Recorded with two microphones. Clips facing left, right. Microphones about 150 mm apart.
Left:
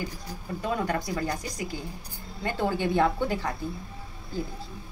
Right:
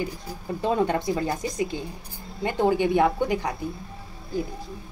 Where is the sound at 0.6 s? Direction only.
25° right (ahead or behind).